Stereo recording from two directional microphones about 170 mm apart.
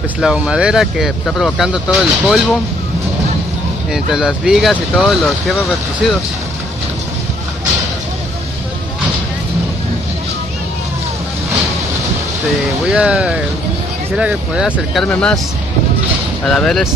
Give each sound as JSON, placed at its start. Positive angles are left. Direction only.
{"t": 0.2, "sound": "speech", "side_deg": -5}
{"t": 3.9, "sound": "speech", "side_deg": -5}
{"t": 12.9, "sound": "speech", "side_deg": -5}
{"t": 16.4, "sound": "speech", "side_deg": 5}